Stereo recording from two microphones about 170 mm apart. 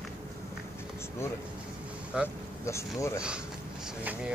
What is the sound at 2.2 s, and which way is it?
Speech, 15° left (ahead or behind).